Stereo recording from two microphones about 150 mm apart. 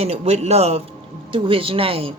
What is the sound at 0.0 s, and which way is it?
A woman's voice, 45° right (ahead or behind).